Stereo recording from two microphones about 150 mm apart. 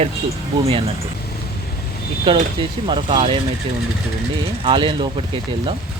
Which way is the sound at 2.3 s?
35° right (ahead or behind).